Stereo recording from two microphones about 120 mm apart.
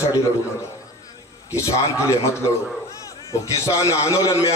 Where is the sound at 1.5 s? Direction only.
25° left (ahead or behind).